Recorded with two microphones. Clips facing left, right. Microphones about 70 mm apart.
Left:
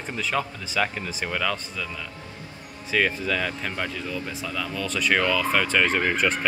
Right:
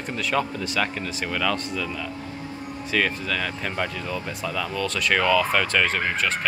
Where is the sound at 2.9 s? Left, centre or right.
Centre.